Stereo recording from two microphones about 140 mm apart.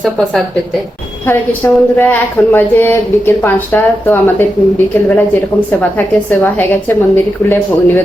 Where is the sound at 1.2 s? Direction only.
15° left (ahead or behind).